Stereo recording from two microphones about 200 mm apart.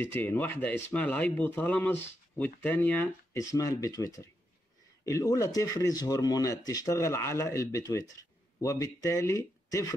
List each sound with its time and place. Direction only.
0.0 s speech: 10° left (ahead or behind)